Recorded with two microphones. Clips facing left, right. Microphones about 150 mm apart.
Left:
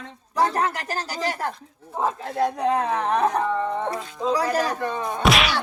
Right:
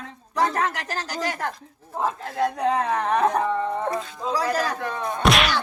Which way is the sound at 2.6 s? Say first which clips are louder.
Even; 5° left (ahead or behind).